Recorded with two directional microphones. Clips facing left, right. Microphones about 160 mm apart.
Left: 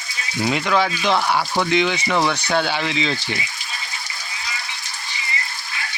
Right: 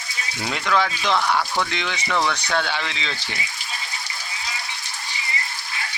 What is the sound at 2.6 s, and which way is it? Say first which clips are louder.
Speech: left 5 dB; 10° left (ahead or behind).